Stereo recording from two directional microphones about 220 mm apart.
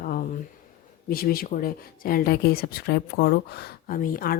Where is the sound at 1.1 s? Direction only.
45° left (ahead or behind).